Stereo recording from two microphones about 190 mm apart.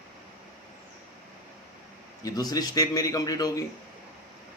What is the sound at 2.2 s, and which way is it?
A man's voice, 20° left (ahead or behind).